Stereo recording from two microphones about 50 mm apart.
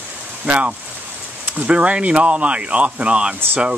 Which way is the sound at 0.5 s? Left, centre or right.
Right.